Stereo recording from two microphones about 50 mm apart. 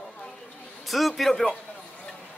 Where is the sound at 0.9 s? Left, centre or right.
Centre.